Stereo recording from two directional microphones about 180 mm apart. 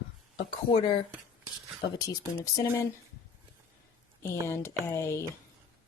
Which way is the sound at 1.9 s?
20° left (ahead or behind).